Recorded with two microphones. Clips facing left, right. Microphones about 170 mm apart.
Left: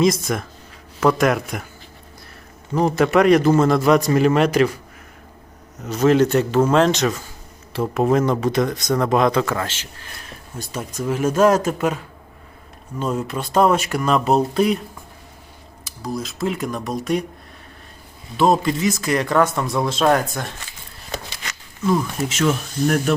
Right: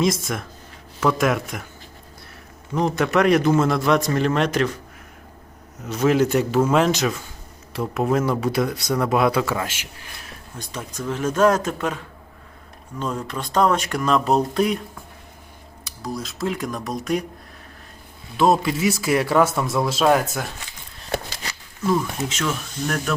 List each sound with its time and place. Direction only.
0.0 s speech: centre (ahead or behind)
2.7 s speech: 5° left (ahead or behind)
6.1 s speech: 10° right (ahead or behind)
10.2 s speech: 10° left (ahead or behind)
13.0 s speech: 10° left (ahead or behind)
15.8 s speech: centre (ahead or behind)
18.3 s speech: centre (ahead or behind)
21.4 s a sound: 35° right (ahead or behind)
21.8 s speech: 5° left (ahead or behind)